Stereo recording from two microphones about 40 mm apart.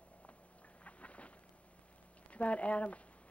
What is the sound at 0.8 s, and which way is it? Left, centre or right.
Boat, left.